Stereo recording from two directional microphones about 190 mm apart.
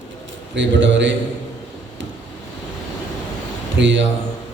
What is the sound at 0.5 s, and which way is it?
Speech, 70° right (ahead or behind).